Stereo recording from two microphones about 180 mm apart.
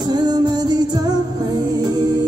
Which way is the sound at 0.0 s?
25° right (ahead or behind).